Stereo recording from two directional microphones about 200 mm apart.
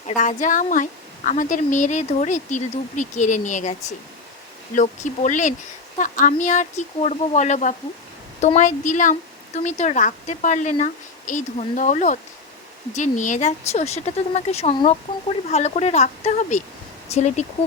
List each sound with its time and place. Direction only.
0.2 s a woman's voice: 40° left (ahead or behind)